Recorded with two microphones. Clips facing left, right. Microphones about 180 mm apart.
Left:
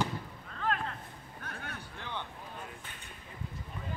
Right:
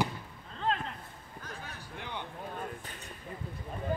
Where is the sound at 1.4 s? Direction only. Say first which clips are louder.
Left 1 dB; 60° left (ahead or behind).